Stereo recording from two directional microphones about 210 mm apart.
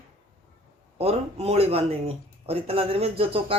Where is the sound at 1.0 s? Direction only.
30° right (ahead or behind).